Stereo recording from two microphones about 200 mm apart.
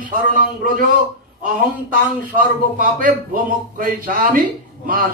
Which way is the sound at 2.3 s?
40° right (ahead or behind).